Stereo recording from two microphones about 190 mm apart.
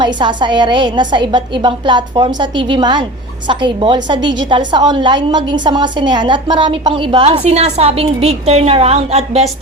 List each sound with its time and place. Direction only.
0.0 s a woman's voice: 25° right (ahead or behind)